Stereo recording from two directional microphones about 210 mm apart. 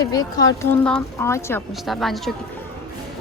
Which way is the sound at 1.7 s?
Centre (ahead or behind).